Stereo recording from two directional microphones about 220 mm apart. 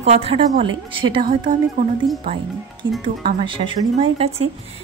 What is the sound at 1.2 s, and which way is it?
Speech, 35° right (ahead or behind).